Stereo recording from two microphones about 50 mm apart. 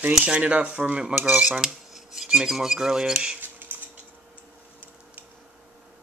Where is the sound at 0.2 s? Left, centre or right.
Right.